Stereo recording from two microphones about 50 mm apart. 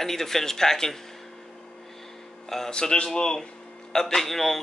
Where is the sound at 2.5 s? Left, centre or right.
Centre.